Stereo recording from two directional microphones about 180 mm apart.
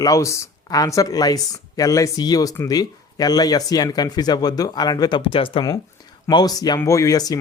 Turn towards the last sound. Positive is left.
turn(degrees=20)  # may be behind; listen again after turning